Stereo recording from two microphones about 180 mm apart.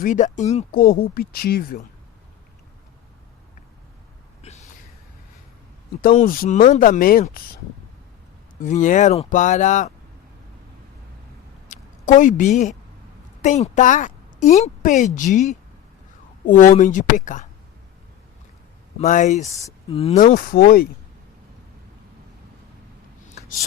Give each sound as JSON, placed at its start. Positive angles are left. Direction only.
{"t": 0.0, "sound": "speech", "side_deg": 45}
{"t": 0.7, "sound": "a woman's voice", "side_deg": 55}
{"t": 4.4, "sound": "a sound", "side_deg": 35}
{"t": 6.0, "sound": "speech", "side_deg": 50}
{"t": 8.6, "sound": "speech", "side_deg": 45}
{"t": 11.7, "sound": "a woman's voice", "side_deg": 45}
{"t": 18.9, "sound": "speech", "side_deg": 45}
{"t": 20.1, "sound": "a woman's voice", "side_deg": 45}